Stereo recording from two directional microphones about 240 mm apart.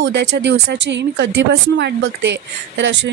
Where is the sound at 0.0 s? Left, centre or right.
Right.